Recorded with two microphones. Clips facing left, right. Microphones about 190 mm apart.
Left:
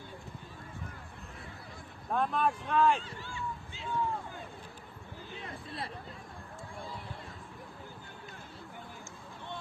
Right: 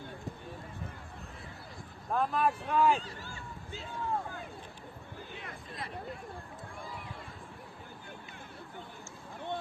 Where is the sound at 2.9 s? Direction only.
40° right (ahead or behind).